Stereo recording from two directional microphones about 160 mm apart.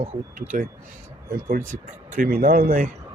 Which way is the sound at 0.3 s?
60° right (ahead or behind).